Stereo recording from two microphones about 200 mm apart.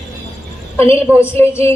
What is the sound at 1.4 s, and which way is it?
Speech, 10° left (ahead or behind).